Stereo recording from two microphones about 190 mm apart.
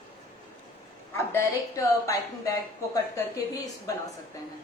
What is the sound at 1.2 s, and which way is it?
A woman's voice, 15° left (ahead or behind).